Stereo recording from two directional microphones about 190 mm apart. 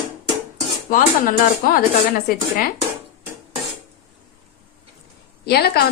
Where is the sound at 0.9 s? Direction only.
50° left (ahead or behind).